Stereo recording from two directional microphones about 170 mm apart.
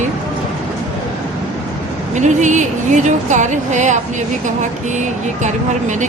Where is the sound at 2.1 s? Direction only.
45° right (ahead or behind).